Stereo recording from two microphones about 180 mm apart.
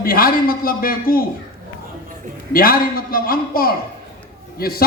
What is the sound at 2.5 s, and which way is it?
A man's voice, 55° left (ahead or behind).